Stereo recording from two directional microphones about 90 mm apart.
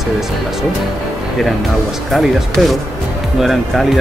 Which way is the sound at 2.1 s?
Centre (ahead or behind).